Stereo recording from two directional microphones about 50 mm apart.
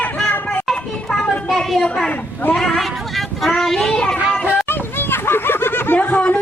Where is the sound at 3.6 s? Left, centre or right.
Centre.